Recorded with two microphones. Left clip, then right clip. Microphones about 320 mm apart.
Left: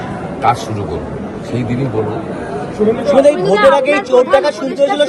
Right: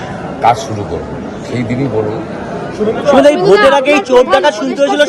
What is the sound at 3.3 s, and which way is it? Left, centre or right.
Speech, right.